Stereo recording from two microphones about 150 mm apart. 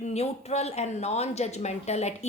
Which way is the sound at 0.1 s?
45° left (ahead or behind).